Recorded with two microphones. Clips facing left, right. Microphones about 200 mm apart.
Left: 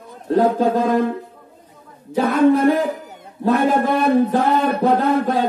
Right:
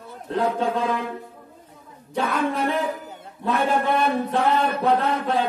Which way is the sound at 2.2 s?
40° left (ahead or behind).